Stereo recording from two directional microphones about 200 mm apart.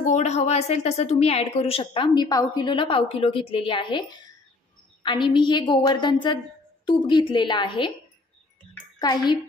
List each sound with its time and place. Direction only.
0.0 s speech: 35° left (ahead or behind)
5.0 s speech: 25° left (ahead or behind)
9.0 s speech: 20° left (ahead or behind)